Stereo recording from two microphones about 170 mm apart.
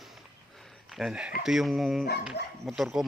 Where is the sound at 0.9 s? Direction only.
Centre (ahead or behind).